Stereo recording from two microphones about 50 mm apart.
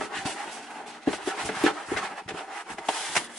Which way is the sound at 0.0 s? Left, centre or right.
Centre.